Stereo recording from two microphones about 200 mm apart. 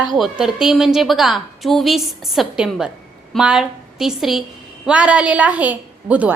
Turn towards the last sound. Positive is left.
turn(degrees=-5)  # may be behind; listen again after turning